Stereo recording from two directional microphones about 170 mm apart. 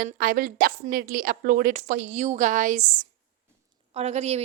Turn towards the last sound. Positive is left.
turn(degrees=-40)  # may be behind; listen again after turning